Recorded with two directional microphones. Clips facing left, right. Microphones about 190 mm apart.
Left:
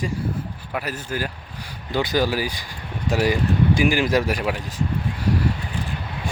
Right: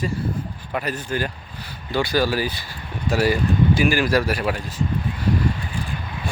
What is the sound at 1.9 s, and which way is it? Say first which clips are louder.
Speech: right 1 dB; 20° left (ahead or behind).